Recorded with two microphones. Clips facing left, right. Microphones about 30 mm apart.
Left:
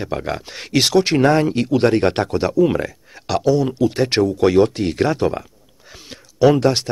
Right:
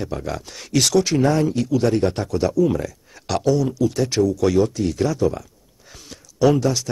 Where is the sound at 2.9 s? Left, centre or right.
Left.